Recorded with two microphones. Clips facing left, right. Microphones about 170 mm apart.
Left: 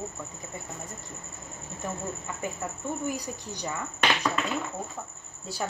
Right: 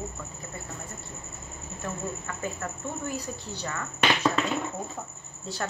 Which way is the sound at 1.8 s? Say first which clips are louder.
Even; 15° left (ahead or behind).